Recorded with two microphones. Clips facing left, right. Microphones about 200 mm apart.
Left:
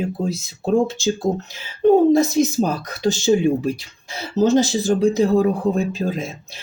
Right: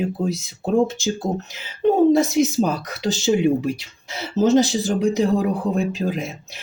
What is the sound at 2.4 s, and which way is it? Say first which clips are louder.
Speech: even; 15° right (ahead or behind).